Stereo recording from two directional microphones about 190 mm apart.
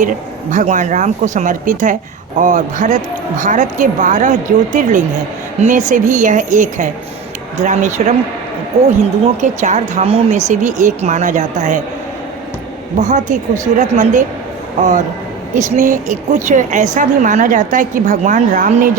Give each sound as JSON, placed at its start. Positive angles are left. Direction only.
{"t": 0.0, "sound": "a woman's voice", "side_deg": -40}
{"t": 13.0, "sound": "a woman's voice", "side_deg": -40}